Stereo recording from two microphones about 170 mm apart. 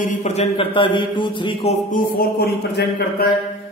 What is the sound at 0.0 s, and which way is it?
Speech, 45° left (ahead or behind).